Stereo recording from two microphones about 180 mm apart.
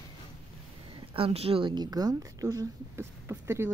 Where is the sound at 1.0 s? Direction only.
30° right (ahead or behind); by 3.6 s 15° right (ahead or behind).